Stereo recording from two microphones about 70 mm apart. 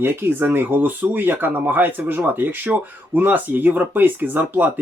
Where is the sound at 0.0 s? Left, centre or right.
Right.